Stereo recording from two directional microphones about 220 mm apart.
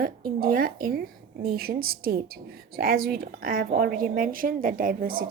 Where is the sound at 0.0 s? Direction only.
40° right (ahead or behind).